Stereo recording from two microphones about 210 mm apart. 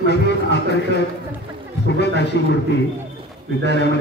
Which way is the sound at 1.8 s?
55° left (ahead or behind).